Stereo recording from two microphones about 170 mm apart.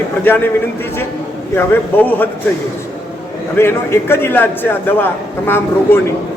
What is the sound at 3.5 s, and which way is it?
A man's voice, 15° left (ahead or behind).